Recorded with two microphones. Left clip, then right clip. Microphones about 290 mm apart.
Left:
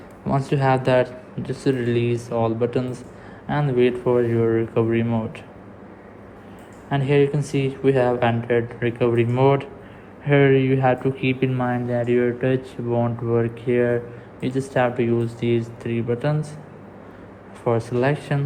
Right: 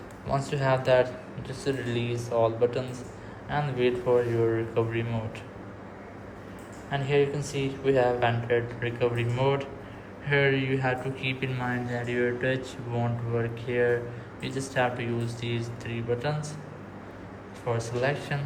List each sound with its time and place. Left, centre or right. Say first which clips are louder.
0.3 s speech: left 6 dB; left
6.9 s speech: left 6 dB; left
17.7 s speech: left 7 dB; left